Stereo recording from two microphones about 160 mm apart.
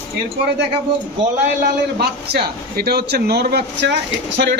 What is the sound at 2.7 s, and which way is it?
Speech, 80° right.